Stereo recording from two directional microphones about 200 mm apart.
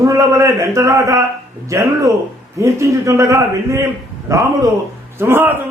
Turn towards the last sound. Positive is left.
turn(degrees=-10)  # may be behind; listen again after turning